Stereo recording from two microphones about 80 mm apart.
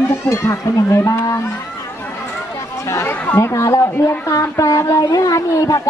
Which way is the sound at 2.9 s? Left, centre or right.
Left.